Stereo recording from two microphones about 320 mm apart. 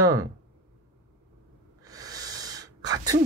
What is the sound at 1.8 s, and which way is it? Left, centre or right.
Gasp, centre.